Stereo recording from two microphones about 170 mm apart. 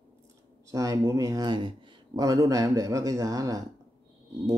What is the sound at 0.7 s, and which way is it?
Speech, 20° right (ahead or behind).